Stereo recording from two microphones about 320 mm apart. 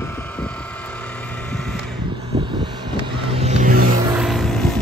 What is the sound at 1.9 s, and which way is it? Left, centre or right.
Vehicle, centre.